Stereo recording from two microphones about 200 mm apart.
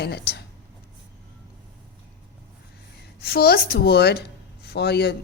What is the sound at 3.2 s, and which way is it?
A woman's voice, 50° left (ahead or behind).